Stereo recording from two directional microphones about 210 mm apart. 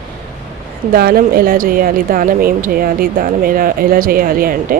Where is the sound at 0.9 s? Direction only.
45° right (ahead or behind).